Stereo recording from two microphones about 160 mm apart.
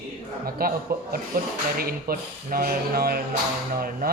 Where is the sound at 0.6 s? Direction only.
65° right (ahead or behind).